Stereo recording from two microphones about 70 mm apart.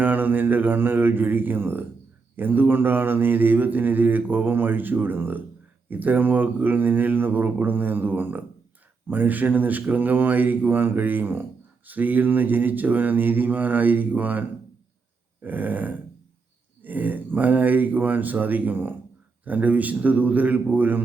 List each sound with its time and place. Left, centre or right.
0.0 s mantra: right